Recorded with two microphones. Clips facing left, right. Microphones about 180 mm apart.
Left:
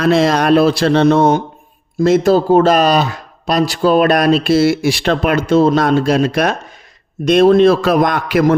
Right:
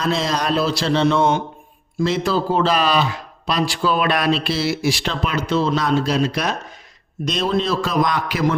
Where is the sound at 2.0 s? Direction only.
45° left (ahead or behind).